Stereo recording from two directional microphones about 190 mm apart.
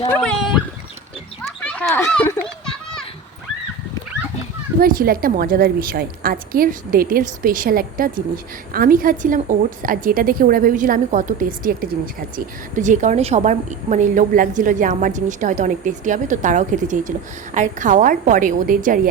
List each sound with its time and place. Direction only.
0.1 s speech: 5° left (ahead or behind)
1.5 s children playing: 10° left (ahead or behind)
4.8 s a woman's voice: 50° right (ahead or behind)